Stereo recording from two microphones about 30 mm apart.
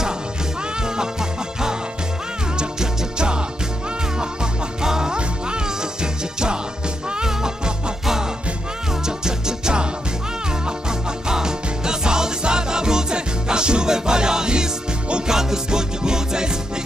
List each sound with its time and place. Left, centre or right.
2.5 s music: right
7.2 s music: centre
10.9 s music: right